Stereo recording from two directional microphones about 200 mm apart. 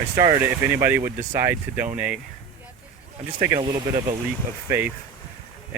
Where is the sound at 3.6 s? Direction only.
20° right (ahead or behind).